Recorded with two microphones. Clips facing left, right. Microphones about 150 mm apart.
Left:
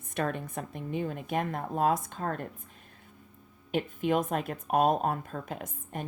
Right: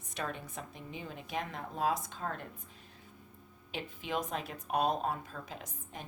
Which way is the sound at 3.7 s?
50° left (ahead or behind).